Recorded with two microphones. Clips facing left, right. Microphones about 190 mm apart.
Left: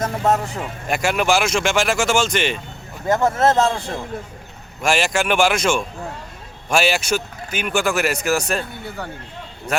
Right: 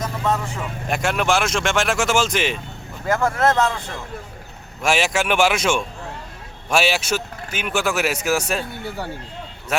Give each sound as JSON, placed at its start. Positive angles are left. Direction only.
{"t": 0.0, "sound": "speech", "side_deg": 45}
{"t": 0.9, "sound": "a man's voice", "side_deg": 0}
{"t": 3.1, "sound": "speech", "side_deg": 20}
{"t": 4.8, "sound": "a man's voice", "side_deg": -5}